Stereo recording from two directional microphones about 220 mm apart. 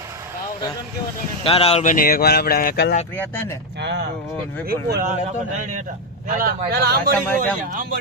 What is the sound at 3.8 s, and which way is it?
Speech, 50° right (ahead or behind).